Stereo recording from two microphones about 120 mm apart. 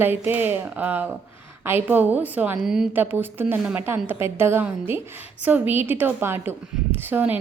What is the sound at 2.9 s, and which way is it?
A woman's voice, 15° right (ahead or behind).